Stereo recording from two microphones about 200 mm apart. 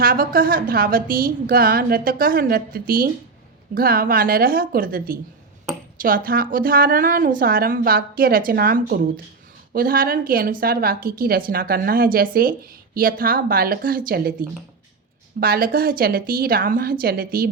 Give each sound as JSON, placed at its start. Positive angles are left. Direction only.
{"t": 0.0, "sound": "a woman's voice", "side_deg": -45}